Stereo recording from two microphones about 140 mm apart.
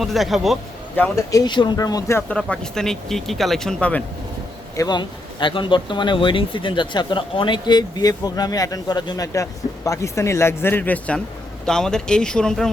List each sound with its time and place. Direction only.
0.0 s speech: centre (ahead or behind)
0.9 s speech: 10° left (ahead or behind)
1.3 s speech: 30° left (ahead or behind)
2.3 s speech: 5° left (ahead or behind)
4.8 s speech: 30° left (ahead or behind); by 12.7 s 5° left (ahead or behind)